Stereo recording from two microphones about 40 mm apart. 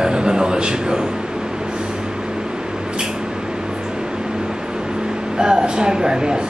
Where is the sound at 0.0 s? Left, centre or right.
Centre.